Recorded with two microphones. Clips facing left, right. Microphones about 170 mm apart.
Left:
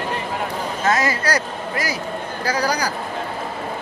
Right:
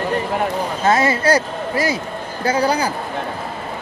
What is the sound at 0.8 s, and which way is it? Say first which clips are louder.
A man's voice: right 4 dB; 25° right (ahead or behind).